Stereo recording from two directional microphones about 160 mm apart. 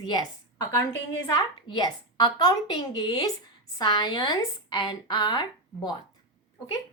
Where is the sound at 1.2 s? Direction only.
25° left (ahead or behind).